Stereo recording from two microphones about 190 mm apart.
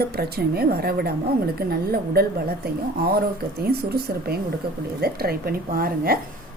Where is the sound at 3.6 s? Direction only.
55° right (ahead or behind).